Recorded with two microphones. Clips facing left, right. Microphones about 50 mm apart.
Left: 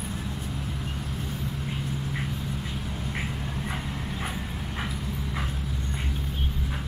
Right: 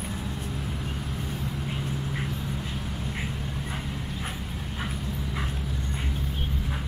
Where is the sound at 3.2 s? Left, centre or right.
Centre.